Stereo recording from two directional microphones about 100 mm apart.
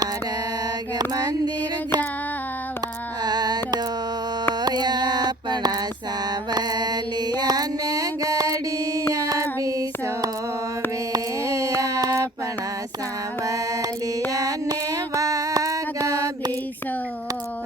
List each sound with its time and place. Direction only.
0.9 s mantra: 40° right (ahead or behind)
3.2 s music: 45° right (ahead or behind)
4.6 s mantra: 45° right (ahead or behind)
9.1 s female singing: 35° right (ahead or behind)
11.1 s mantra: 35° right (ahead or behind)
13.4 s mantra: 35° right (ahead or behind)
14.3 s a sound: 35° right (ahead or behind)
16.0 s mantra: 35° right (ahead or behind)